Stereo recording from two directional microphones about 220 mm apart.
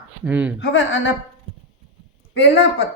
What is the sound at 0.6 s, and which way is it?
Speech, 60° left (ahead or behind).